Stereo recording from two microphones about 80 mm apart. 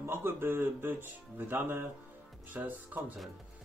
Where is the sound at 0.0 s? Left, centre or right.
Right.